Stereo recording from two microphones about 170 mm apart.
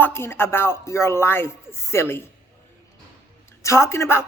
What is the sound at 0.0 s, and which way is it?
Speech, 15° left (ahead or behind).